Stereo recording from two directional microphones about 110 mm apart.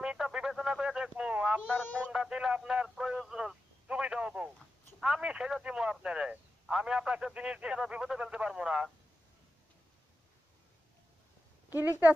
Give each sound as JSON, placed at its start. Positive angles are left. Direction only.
{"t": 0.0, "sound": "radio", "side_deg": -5}
{"t": 1.7, "sound": "speech", "side_deg": 15}
{"t": 2.0, "sound": "radio", "side_deg": -5}
{"t": 4.9, "sound": "speech", "side_deg": -5}
{"t": 11.8, "sound": "speech", "side_deg": -15}